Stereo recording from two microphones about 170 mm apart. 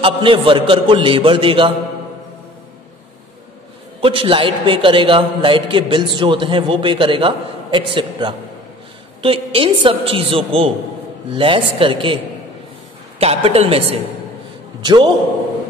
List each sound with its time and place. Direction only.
0.0 s a man's voice: 30° right (ahead or behind)
4.0 s a man's voice: 30° right (ahead or behind)
13.2 s a man's voice: 35° right (ahead or behind)